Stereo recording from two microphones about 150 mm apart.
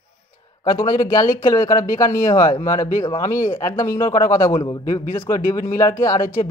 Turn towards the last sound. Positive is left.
turn(degrees=20)  # may be behind; listen again after turning